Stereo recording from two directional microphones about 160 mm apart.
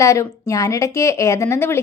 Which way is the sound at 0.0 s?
20° left (ahead or behind).